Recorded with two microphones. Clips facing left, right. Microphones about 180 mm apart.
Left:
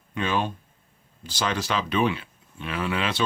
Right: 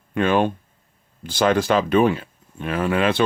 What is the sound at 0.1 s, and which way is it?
Speech, 55° right (ahead or behind).